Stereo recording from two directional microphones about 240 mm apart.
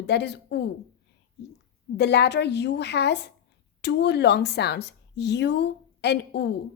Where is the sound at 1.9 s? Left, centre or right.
Left.